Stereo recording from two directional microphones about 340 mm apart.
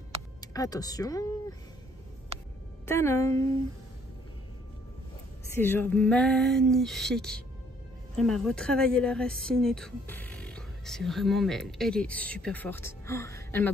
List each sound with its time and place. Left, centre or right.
0.4 s speech: centre
2.3 s a sound: centre
2.9 s a woman's voice: centre
5.5 s a woman's voice: centre